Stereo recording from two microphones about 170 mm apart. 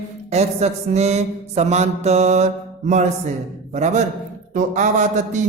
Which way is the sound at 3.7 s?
45° right (ahead or behind).